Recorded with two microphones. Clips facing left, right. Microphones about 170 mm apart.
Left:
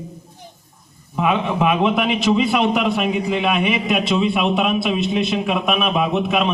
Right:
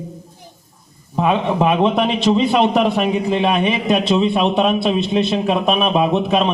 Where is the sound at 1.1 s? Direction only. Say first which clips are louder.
Right 2 dB; 35° right (ahead or behind).